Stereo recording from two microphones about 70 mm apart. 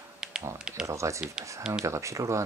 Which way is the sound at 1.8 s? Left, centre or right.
Right.